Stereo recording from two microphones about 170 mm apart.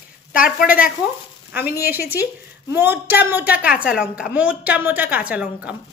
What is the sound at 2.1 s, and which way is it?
Speech, 10° right (ahead or behind).